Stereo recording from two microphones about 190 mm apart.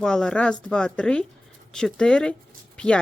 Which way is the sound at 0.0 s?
5° left (ahead or behind).